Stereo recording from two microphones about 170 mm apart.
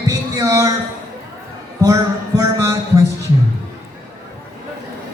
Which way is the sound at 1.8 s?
20° right (ahead or behind).